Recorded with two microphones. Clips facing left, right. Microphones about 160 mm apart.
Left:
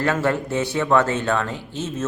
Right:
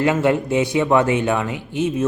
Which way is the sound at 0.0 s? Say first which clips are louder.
Right 4 dB; 15° right (ahead or behind).